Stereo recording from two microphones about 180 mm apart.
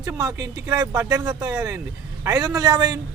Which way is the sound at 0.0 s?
20° right (ahead or behind).